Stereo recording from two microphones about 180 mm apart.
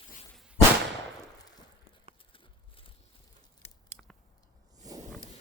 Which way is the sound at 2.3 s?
30° left (ahead or behind).